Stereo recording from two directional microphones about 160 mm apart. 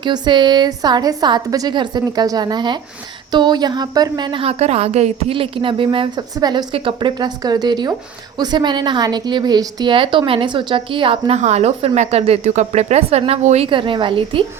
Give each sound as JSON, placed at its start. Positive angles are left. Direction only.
{"t": 0.0, "sound": "a woman's voice", "side_deg": -30}
{"t": 11.3, "sound": "speech", "side_deg": -45}
{"t": 13.7, "sound": "speech", "side_deg": -30}